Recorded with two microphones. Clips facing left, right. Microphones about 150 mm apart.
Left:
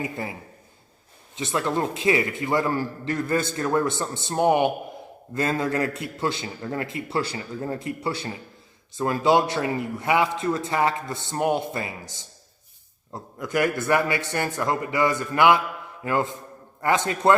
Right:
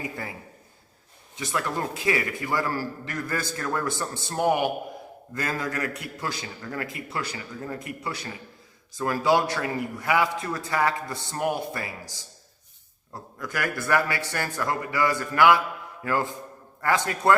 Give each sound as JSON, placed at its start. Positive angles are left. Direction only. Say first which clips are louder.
{"t": 1.4, "sound": "a man's voice", "louder": "left 4 dB", "side_deg": 25}